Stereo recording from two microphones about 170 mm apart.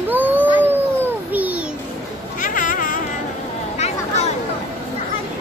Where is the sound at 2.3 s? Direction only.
50° left (ahead or behind).